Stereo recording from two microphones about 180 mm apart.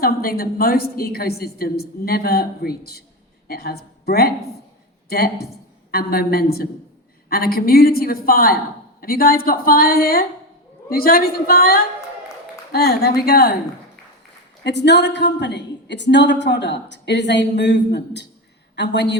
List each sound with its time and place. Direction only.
0.0 s a woman's voice: 55° left (ahead or behind)
14.6 s a woman's voice: 70° left (ahead or behind)